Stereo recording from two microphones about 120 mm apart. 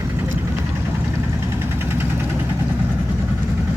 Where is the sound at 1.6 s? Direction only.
20° right (ahead or behind).